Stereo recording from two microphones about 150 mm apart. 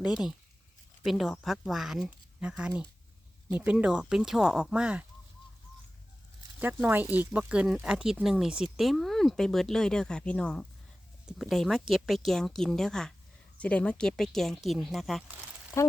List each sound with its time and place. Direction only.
0.0 s speech: 5° right (ahead or behind)
6.6 s speech: 15° right (ahead or behind)
15.8 s speech: 20° left (ahead or behind)